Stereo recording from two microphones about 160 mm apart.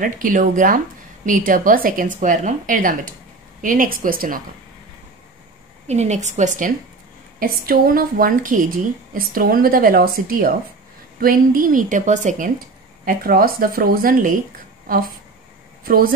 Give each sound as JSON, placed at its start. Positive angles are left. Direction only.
{"t": 0.0, "sound": "speech", "side_deg": -60}
{"t": 5.9, "sound": "a woman's voice", "side_deg": -45}
{"t": 7.3, "sound": "speech", "side_deg": -65}
{"t": 13.0, "sound": "speech", "side_deg": -65}
{"t": 15.8, "sound": "speech", "side_deg": -65}